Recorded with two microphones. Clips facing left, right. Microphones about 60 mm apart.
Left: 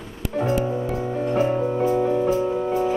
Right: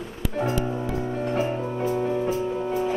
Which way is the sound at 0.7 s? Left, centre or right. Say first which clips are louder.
Left 3 dB; centre.